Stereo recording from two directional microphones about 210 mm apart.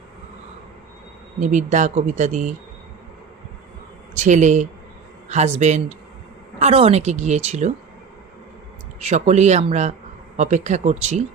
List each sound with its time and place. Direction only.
1.4 s speech: 35° right (ahead or behind)
4.1 s speech: 35° right (ahead or behind)
9.0 s speech: 30° right (ahead or behind)